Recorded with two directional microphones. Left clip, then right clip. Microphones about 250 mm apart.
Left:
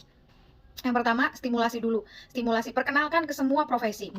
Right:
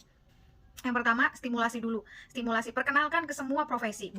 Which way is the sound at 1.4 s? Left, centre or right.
Centre.